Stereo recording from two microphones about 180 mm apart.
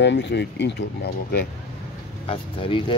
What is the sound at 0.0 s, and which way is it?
Speech, 75° left (ahead or behind).